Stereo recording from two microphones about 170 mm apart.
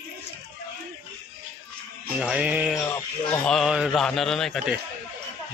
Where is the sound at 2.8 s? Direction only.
15° left (ahead or behind).